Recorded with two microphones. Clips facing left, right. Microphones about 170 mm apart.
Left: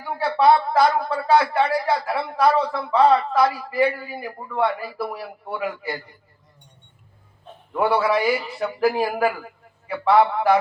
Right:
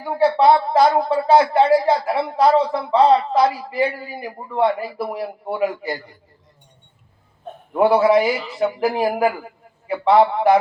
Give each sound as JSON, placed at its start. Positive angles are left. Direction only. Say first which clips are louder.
{"t": 0.0, "sound": "speech", "louder": "right 4 dB", "side_deg": -25}
{"t": 7.7, "sound": "speech", "louder": "right 6 dB", "side_deg": -25}